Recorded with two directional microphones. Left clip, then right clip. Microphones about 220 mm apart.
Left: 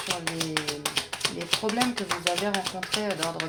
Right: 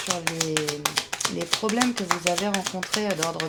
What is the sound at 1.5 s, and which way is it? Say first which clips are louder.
Speech: right 2 dB; 25° right (ahead or behind).